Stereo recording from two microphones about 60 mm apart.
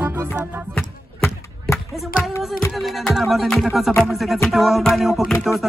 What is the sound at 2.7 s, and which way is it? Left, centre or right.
Music, centre.